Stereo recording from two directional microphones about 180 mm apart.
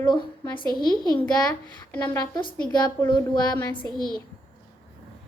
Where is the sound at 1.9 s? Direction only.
10° left (ahead or behind).